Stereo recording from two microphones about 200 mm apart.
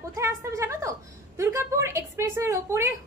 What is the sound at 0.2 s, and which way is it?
A woman's voice, 15° right (ahead or behind).